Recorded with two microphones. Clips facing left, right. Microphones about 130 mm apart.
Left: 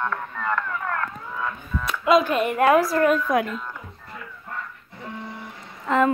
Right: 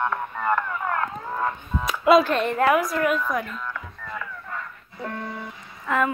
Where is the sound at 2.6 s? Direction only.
30° left (ahead or behind).